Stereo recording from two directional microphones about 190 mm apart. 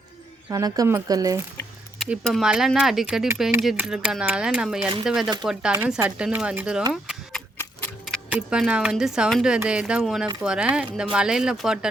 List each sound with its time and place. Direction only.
0.5 s speech: 20° right (ahead or behind)
2.0 s speech: centre (ahead or behind)
6.9 s a sound: centre (ahead or behind)
8.0 s speech: 5° right (ahead or behind)